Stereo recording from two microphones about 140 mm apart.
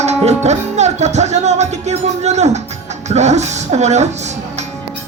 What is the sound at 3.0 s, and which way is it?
Speech, 55° right (ahead or behind).